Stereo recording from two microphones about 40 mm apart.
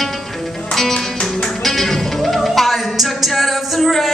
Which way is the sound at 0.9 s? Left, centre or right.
Centre.